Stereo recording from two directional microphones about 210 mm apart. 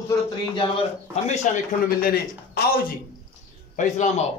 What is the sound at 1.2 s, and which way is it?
Speech, 40° left (ahead or behind).